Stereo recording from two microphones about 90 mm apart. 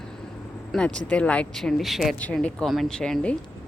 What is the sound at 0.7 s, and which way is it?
Speech, 10° left (ahead or behind).